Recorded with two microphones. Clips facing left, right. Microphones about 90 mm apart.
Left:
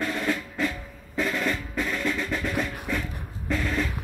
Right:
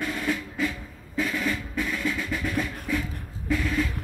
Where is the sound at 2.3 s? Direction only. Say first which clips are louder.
Even; 15° left (ahead or behind).